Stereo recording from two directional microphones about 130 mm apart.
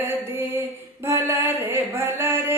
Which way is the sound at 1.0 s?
20° right (ahead or behind).